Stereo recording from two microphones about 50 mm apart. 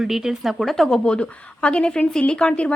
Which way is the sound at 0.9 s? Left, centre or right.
Centre.